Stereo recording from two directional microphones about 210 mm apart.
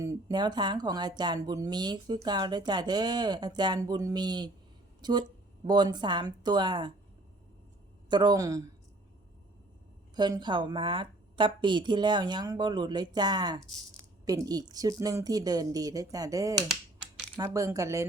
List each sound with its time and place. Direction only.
0.0 s a woman's voice: 15° right (ahead or behind)
8.1 s speech: 20° right (ahead or behind)
10.2 s a woman's voice: 20° right (ahead or behind)